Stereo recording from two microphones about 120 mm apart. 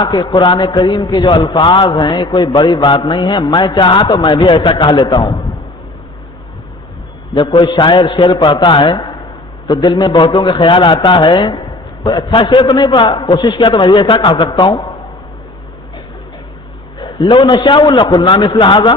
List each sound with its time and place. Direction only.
0.0 s mantra: 35° left (ahead or behind)
5.0 s a man's voice: 30° left (ahead or behind)
7.3 s mantra: 35° left (ahead or behind)
12.4 s a man's voice: 45° left (ahead or behind)
12.7 s mantra: 40° left (ahead or behind)
17.0 s mantra: 40° left (ahead or behind)